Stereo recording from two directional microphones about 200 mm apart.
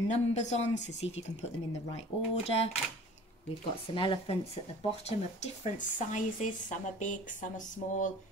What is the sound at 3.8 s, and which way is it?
A woman's voice, 25° left (ahead or behind).